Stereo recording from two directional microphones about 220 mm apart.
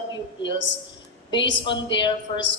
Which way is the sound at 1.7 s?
20° left (ahead or behind).